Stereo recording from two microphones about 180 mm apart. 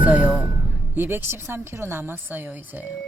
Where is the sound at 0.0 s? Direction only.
10° right (ahead or behind).